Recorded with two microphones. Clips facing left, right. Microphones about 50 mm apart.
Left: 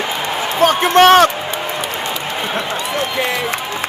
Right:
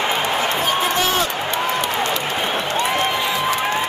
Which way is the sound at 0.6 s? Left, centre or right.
Left.